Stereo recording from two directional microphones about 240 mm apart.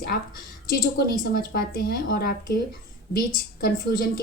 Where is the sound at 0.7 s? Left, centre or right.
Left.